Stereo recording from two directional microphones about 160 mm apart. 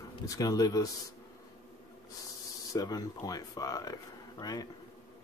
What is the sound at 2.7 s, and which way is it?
Speech, 25° left (ahead or behind).